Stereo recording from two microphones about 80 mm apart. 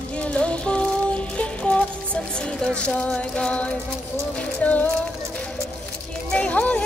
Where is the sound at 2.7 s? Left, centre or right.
Centre.